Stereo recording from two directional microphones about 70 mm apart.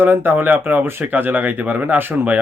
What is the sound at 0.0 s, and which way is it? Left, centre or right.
Speech, right.